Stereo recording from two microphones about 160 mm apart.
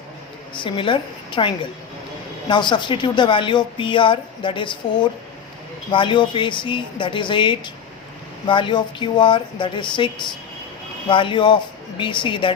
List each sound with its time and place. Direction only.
0.5 s speech: 30° left (ahead or behind)